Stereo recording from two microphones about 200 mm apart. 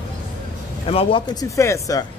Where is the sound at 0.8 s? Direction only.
30° left (ahead or behind).